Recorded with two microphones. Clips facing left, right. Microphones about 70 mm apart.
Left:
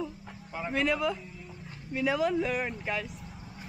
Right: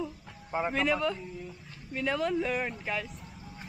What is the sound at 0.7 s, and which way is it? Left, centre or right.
Speech, centre.